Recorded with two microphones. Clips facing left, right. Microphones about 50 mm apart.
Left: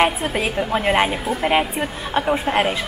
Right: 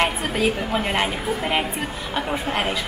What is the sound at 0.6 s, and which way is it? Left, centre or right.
Speech, centre.